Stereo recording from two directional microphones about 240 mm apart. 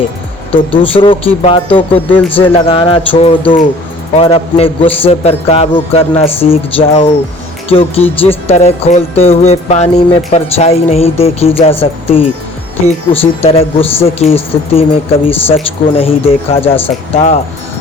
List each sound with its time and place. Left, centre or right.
0.5 s music: left
15.3 s speech: centre
16.0 s music: left